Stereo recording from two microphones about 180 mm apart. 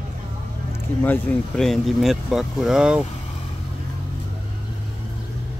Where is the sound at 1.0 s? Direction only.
5° left (ahead or behind).